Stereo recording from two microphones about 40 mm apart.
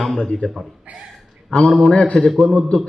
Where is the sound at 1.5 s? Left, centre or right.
Left.